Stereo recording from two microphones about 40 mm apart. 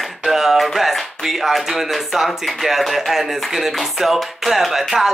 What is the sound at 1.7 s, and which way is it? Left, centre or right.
Speech, centre.